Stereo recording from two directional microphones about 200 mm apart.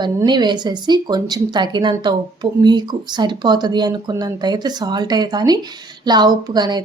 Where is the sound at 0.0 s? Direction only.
20° right (ahead or behind).